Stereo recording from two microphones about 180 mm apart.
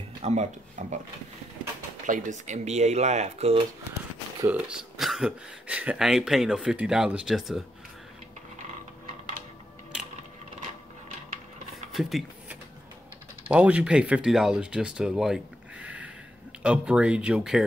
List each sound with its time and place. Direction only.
0.2 s speech: 40° right (ahead or behind)
2.0 s speech: 45° right (ahead or behind)
4.5 s speech: 5° right (ahead or behind)
11.9 s a sound: centre (ahead or behind)
13.5 s speech: 5° right (ahead or behind)